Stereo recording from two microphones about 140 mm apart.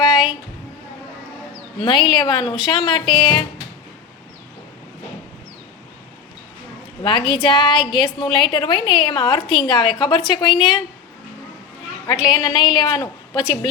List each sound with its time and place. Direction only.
1.8 s a woman's voice: 35° left (ahead or behind)
7.0 s a woman's voice: 35° left (ahead or behind)
12.0 s a woman's voice: 30° left (ahead or behind)